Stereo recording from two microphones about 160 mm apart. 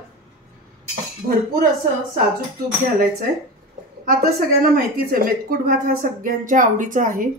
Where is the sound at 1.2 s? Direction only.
75° right (ahead or behind).